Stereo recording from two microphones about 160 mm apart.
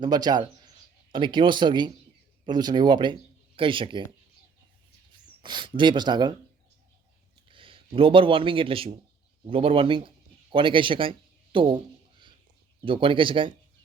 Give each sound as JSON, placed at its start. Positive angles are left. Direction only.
{"t": 0.0, "sound": "speech", "side_deg": -25}
{"t": 5.4, "sound": "speech", "side_deg": -30}
{"t": 7.5, "sound": "speech", "side_deg": -35}
{"t": 12.8, "sound": "speech", "side_deg": -30}